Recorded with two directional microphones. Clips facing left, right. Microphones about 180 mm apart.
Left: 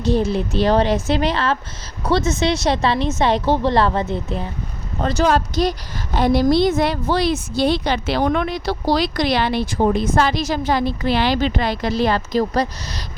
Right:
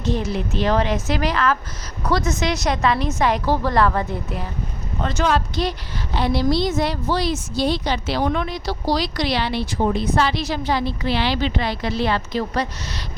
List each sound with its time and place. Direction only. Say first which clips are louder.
0.0 s a woman's voice: left 5 dB; 30° left (ahead or behind)
4.9 s a woman's voice: left 3 dB; 40° left (ahead or behind)